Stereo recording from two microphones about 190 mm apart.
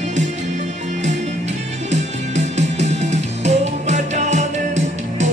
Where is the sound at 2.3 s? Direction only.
35° right (ahead or behind).